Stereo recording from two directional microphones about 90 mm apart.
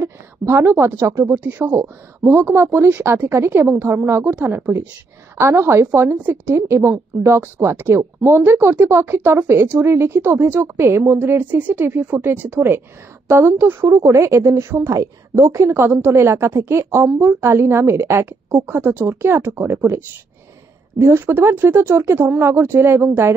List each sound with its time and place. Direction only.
0.0 s a woman's voice: 30° right (ahead or behind)
13.8 s a woman's voice: 40° right (ahead or behind)
21.0 s a woman's voice: 25° right (ahead or behind)